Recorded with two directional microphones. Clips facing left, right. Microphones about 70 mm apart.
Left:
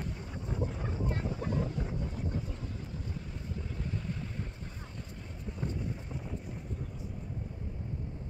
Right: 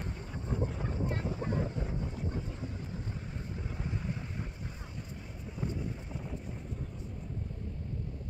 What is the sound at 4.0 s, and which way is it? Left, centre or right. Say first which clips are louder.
Boat: even; centre.